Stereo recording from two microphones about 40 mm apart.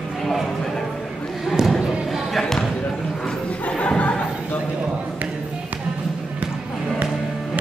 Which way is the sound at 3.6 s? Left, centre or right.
Left.